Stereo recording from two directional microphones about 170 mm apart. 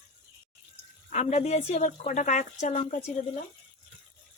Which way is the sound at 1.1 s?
40° left (ahead or behind).